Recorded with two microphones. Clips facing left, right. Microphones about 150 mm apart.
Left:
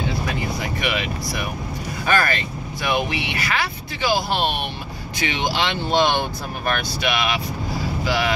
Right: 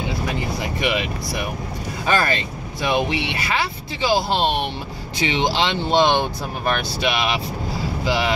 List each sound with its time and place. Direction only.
0.3 s vehicle: 25° right (ahead or behind)
2.0 s speech: 25° right (ahead or behind)